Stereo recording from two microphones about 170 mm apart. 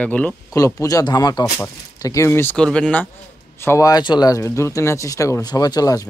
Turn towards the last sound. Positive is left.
turn(degrees=20)  # may be behind; listen again after turning